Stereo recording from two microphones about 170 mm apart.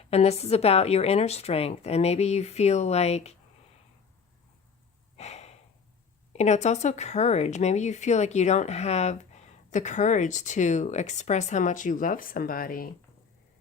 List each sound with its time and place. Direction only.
0.1 s a woman's voice: 40° left (ahead or behind)
5.1 s breathing: 40° left (ahead or behind)
6.3 s speech: 40° left (ahead or behind); by 12.9 s 55° left (ahead or behind)